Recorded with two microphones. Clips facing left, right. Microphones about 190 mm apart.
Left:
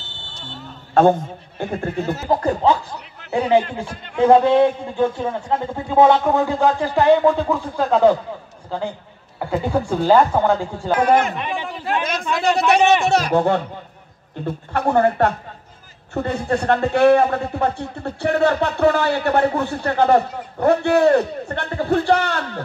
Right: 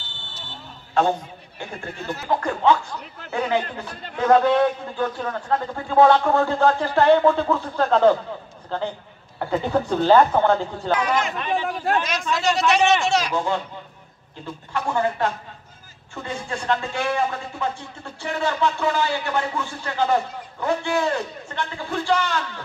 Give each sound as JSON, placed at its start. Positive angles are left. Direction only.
{"t": 0.9, "sound": "a man's voice", "side_deg": 50}
{"t": 2.1, "sound": "a man's voice", "side_deg": 35}
{"t": 11.0, "sound": "a man's voice", "side_deg": 55}